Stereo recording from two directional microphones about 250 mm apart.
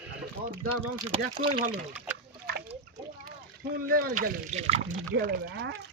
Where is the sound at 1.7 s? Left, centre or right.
Centre.